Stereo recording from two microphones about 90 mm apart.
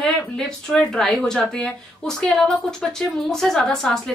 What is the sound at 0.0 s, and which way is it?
Speech, 5° left (ahead or behind).